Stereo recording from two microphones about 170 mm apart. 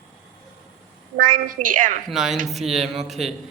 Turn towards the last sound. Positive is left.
turn(degrees=0)  # may be behind; listen again after turning